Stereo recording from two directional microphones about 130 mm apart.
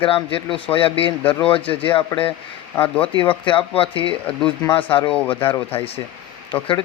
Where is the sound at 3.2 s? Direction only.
40° left (ahead or behind).